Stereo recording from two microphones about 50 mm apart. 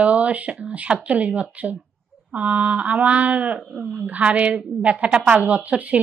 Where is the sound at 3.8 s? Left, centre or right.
Centre.